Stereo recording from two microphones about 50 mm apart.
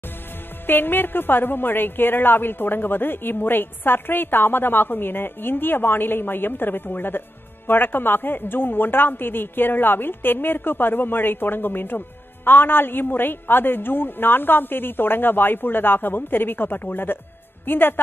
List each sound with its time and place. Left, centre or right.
0.7 s a woman's voice: left